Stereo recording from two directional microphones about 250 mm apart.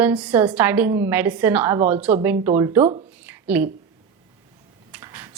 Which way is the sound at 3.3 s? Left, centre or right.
Centre.